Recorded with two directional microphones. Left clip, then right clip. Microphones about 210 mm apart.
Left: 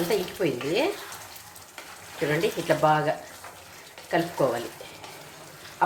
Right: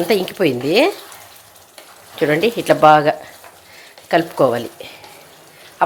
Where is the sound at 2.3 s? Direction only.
55° right (ahead or behind).